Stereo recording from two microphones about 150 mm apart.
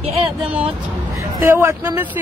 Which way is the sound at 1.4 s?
20° right (ahead or behind).